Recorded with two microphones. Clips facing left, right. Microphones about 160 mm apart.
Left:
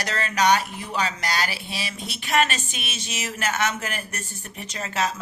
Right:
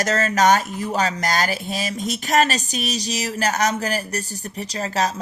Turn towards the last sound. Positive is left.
turn(degrees=-35)  # may be behind; listen again after turning